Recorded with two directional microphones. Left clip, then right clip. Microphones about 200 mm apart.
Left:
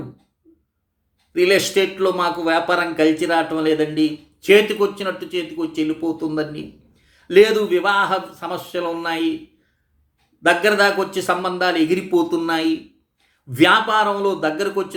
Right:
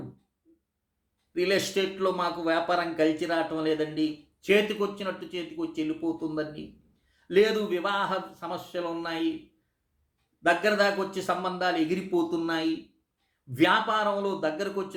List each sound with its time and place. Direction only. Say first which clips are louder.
1.3 s speech: left 10 dB; 10° left (ahead or behind)
10.4 s speech: left 8 dB; 10° left (ahead or behind)